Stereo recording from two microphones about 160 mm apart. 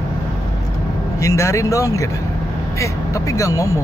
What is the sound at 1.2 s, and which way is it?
Speech, 20° left (ahead or behind).